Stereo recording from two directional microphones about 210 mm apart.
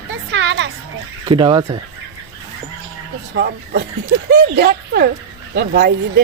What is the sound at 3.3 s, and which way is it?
Speech, 50° right (ahead or behind).